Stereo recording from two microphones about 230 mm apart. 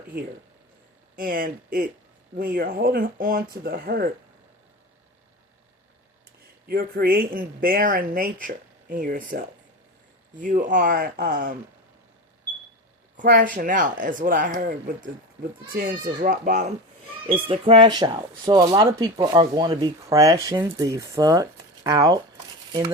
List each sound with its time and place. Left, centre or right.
1.1 s speech: right
6.7 s speech: right
13.1 s speech: right; by 22.2 s centre